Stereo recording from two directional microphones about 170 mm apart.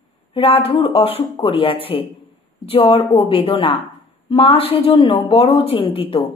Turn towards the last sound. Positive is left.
turn(degrees=30)  # may be behind; listen again after turning